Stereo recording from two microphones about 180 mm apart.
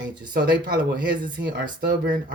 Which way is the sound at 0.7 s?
55° right (ahead or behind).